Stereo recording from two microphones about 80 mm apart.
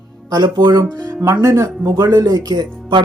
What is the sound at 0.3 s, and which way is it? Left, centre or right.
Speech, right.